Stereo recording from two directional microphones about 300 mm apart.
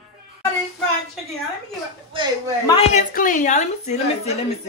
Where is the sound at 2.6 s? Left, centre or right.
Left.